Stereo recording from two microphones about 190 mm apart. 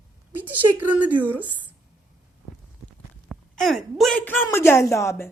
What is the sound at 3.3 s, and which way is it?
A woman's voice, centre (ahead or behind).